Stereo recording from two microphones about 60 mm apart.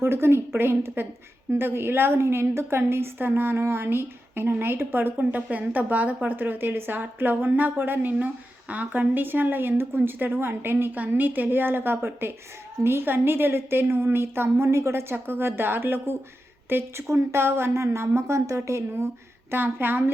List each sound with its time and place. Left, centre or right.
0.0 s a woman's voice: right
15.1 s a woman's voice: right
19.5 s a woman's voice: right